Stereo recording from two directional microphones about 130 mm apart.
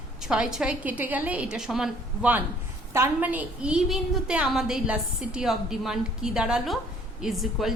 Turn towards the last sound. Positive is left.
turn(degrees=0)  # may be behind; listen again after turning